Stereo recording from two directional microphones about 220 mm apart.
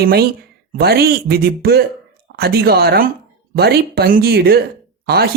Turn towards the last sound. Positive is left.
turn(degrees=-45)  # may be behind; listen again after turning